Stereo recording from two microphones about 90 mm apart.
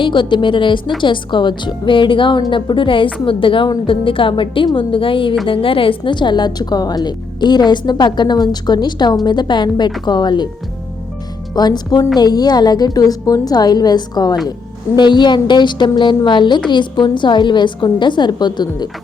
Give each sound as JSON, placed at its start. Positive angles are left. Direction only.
{"t": 0.0, "sound": "a woman's voice", "side_deg": 65}
{"t": 5.5, "sound": "a woman's voice", "side_deg": 85}
{"t": 11.5, "sound": "a woman's voice", "side_deg": 50}